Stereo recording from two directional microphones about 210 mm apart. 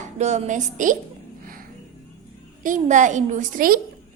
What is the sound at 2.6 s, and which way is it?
Speech, 35° right (ahead or behind).